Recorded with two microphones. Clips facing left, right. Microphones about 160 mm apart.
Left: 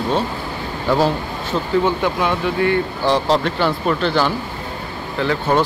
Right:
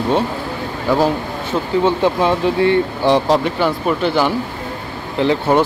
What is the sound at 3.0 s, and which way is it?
Speech, 15° right (ahead or behind).